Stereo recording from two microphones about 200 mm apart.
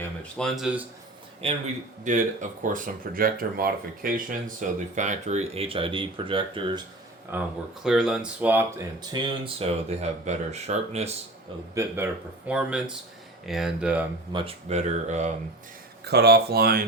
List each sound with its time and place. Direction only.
0.2 s speech: 5° left (ahead or behind)
1.4 s speech: 30° right (ahead or behind)
7.3 s speech: 10° right (ahead or behind)
9.0 s speech: 25° right (ahead or behind)
11.7 s speech: 15° right (ahead or behind)
14.3 s speech: 30° right (ahead or behind)
16.0 s speech: 55° right (ahead or behind)